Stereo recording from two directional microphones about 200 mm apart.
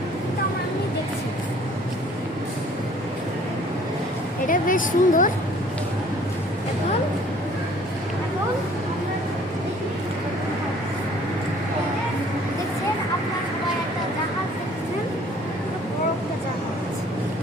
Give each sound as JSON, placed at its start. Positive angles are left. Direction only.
{"t": 4.4, "sound": "a woman's voice", "side_deg": 45}